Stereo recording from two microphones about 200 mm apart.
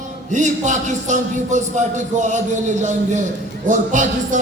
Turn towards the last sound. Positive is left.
turn(degrees=-40)  # may be behind; listen again after turning